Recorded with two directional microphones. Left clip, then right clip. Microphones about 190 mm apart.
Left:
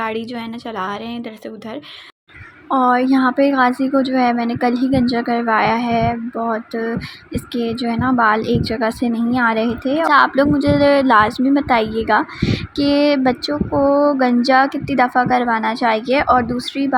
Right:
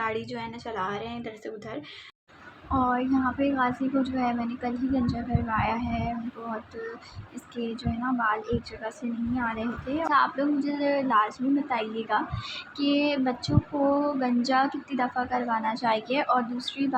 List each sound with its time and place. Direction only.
0.0 s a woman's voice: 45° left (ahead or behind)
2.7 s a woman's voice: 40° left (ahead or behind)
7.5 s a woman's voice: 45° left (ahead or behind)